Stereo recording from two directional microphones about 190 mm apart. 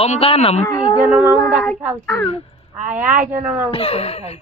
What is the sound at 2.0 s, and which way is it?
Speech, 10° left (ahead or behind).